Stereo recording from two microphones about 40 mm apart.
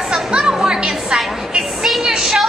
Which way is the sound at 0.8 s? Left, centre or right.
Right.